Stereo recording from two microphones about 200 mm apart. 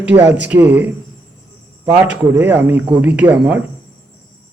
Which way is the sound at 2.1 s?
10° right (ahead or behind).